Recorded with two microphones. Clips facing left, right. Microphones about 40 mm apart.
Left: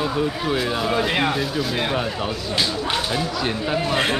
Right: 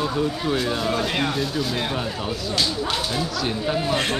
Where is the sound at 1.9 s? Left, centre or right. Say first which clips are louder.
Left 3 dB; centre.